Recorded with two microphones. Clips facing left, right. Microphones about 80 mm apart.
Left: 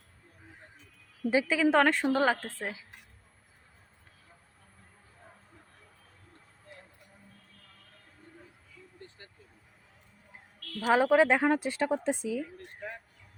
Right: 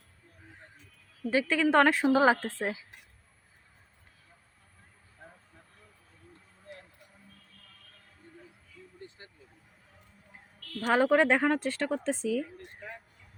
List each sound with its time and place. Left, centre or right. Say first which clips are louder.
1.3 s a woman's voice: even; centre
2.2 s a woman's voice: right 4 dB; centre
9.0 s vehicle: right 2 dB; right
10.8 s a woman's voice: left 1 dB; centre